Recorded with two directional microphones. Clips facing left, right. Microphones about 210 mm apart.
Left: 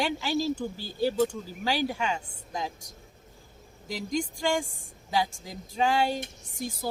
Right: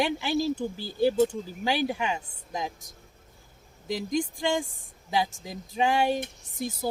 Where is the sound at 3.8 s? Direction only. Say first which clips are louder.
Right 3 dB; 20° right (ahead or behind).